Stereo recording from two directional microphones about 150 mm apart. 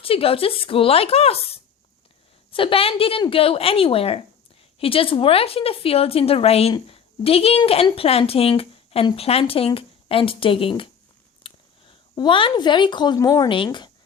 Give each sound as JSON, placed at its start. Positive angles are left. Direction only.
{"t": 0.0, "sound": "speech", "side_deg": 40}